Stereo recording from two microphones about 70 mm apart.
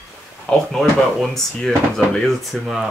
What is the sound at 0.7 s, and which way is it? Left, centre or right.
Speech, centre.